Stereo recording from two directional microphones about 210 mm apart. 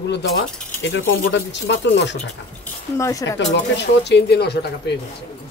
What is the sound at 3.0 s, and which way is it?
Speech, 15° left (ahead or behind).